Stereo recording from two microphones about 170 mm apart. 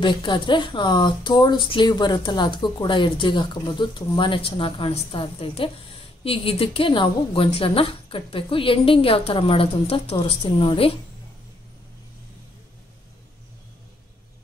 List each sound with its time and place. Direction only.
0.0 s a woman's voice: 30° left (ahead or behind)